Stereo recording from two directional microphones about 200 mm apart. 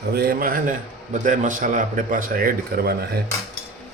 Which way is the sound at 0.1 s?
50° right (ahead or behind).